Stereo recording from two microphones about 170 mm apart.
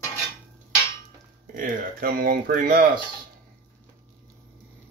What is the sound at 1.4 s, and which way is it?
Speech, 55° right (ahead or behind).